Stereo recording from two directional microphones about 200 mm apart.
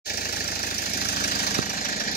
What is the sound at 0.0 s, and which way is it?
Engine, 50° left (ahead or behind).